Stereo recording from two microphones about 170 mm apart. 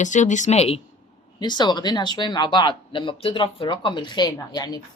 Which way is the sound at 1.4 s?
25° left (ahead or behind).